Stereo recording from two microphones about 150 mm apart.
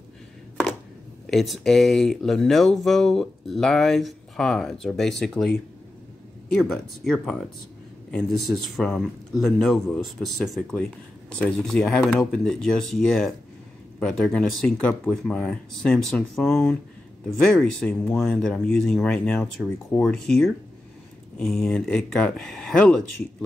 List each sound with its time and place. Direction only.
1.2 s speech: centre (ahead or behind)
17.9 s speech: 15° left (ahead or behind)